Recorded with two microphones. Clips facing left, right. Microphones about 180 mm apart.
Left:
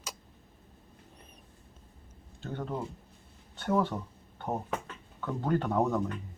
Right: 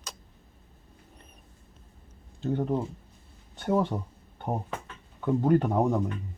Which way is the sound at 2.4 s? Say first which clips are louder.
Right 8 dB; 20° right (ahead or behind).